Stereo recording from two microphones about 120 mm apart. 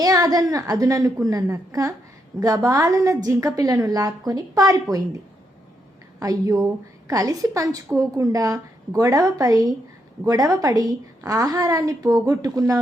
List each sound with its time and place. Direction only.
0.0 s a woman's voice: 30° right (ahead or behind)
6.1 s a woman's voice: 30° right (ahead or behind)